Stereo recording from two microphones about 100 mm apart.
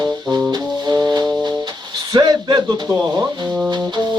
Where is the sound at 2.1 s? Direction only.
45° right (ahead or behind).